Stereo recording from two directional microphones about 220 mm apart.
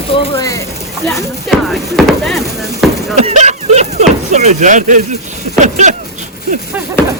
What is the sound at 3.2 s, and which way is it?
Speech, 30° right (ahead or behind).